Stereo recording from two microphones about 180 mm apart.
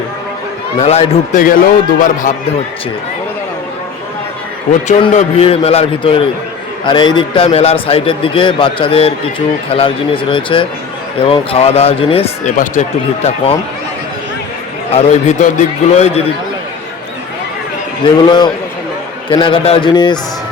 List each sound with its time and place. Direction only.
0.8 s a man's voice: 40° left (ahead or behind)
4.9 s a man's voice: 30° left (ahead or behind)
14.9 s a man's voice: 40° left (ahead or behind)
18.0 s a man's voice: 25° left (ahead or behind)